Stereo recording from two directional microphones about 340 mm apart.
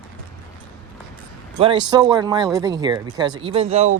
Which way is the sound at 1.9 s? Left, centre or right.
Centre.